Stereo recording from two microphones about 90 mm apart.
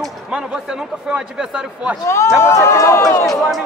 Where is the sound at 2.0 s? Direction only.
30° left (ahead or behind).